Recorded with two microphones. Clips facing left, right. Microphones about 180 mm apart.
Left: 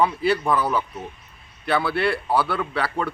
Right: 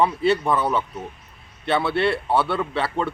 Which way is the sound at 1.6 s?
25° right (ahead or behind).